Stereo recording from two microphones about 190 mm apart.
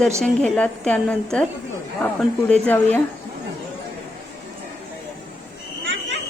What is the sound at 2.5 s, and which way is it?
Speech, 5° left (ahead or behind).